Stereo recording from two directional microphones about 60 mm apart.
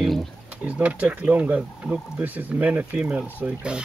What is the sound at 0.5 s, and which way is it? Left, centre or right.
Speech, right.